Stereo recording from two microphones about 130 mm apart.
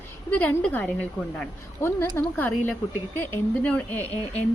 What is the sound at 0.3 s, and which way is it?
A woman's voice, 10° left (ahead or behind).